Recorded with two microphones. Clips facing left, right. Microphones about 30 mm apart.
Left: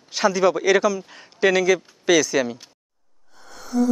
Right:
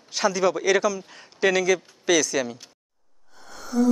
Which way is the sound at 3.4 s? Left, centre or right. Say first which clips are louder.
Left 1 dB; centre.